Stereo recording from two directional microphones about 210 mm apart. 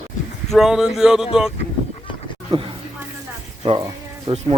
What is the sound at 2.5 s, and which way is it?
Speech, 30° right (ahead or behind).